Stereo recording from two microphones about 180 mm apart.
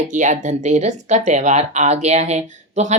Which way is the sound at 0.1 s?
45° right (ahead or behind).